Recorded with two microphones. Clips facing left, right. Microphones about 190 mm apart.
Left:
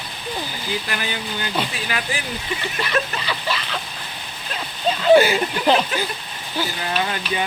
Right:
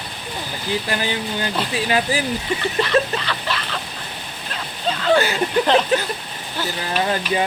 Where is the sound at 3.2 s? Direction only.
Centre (ahead or behind).